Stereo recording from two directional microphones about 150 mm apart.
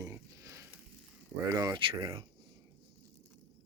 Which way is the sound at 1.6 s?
30° right (ahead or behind).